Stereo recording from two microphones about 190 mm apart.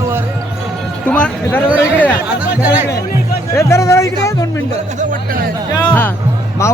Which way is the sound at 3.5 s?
15° left (ahead or behind).